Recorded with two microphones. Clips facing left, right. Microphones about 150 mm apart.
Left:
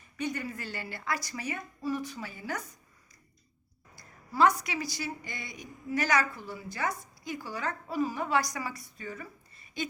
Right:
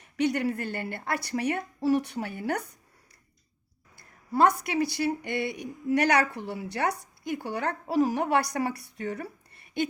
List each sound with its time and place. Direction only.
0.0 s a woman's voice: 75° right (ahead or behind)
3.9 s a woman's voice: 55° right (ahead or behind)